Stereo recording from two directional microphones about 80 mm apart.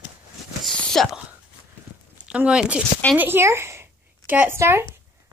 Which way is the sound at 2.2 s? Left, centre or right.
Centre.